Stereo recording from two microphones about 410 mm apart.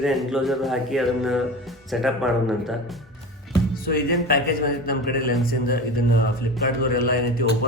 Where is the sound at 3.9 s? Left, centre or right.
Left.